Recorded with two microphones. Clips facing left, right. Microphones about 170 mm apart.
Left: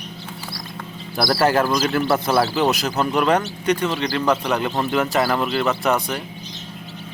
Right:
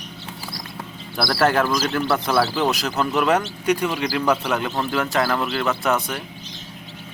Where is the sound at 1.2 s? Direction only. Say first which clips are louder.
Left 3 dB; 20° left (ahead or behind).